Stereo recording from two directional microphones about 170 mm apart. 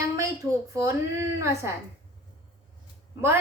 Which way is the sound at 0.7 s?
15° right (ahead or behind).